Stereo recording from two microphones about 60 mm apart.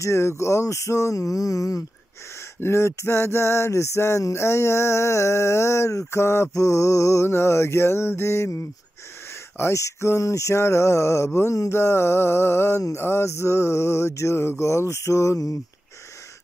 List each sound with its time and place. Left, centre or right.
0.0 s speech: left
2.6 s music: left